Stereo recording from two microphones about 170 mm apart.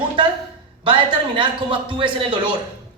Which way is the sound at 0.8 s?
30° right (ahead or behind).